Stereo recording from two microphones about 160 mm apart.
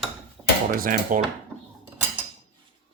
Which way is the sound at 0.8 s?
55° right (ahead or behind).